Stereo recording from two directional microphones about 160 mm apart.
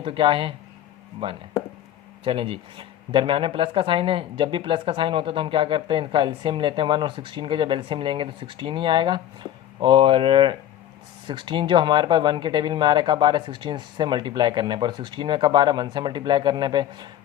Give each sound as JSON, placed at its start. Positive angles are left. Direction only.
{"t": 0.0, "sound": "speech", "side_deg": -35}
{"t": 2.2, "sound": "speech", "side_deg": -35}